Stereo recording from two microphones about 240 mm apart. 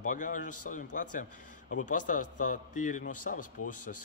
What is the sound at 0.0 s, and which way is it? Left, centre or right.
A man's voice, left.